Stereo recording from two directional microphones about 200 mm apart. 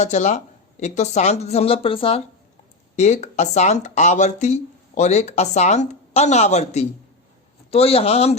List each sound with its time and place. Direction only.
0.0 s a man's voice: 35° left (ahead or behind)